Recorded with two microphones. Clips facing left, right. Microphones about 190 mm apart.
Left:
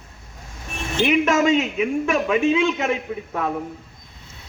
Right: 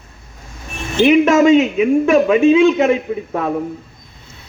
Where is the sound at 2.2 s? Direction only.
55° right (ahead or behind).